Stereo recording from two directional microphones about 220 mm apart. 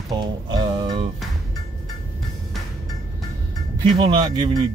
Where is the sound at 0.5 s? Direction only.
20° right (ahead or behind).